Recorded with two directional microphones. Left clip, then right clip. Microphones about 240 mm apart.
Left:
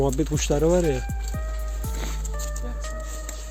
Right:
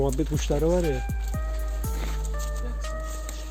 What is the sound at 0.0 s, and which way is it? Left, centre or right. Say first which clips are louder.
Speech: left 3 dB; centre.